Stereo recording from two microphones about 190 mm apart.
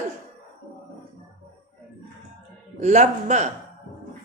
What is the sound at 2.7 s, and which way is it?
Speech, 40° right (ahead or behind).